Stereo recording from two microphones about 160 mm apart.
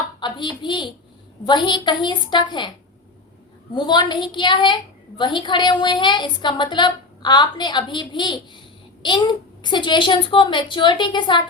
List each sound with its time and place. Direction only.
0.2 s a woman's voice: 30° left (ahead or behind)
3.8 s a woman's voice: 30° left (ahead or behind)